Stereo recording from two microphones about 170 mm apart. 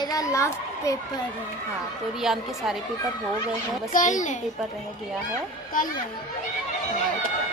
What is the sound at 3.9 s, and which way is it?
Speech, 45° left (ahead or behind).